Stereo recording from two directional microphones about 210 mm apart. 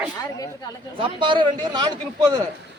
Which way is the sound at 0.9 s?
25° right (ahead or behind).